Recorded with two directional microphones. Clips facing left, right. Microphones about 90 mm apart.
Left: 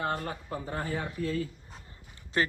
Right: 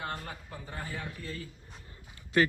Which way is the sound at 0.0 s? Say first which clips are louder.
Left 6 dB; 45° left (ahead or behind).